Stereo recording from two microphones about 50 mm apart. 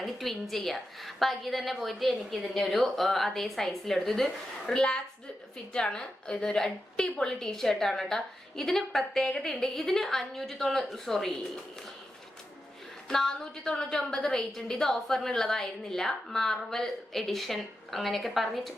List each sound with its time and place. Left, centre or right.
0.0 s a woman's voice: centre
13.1 s a woman's voice: centre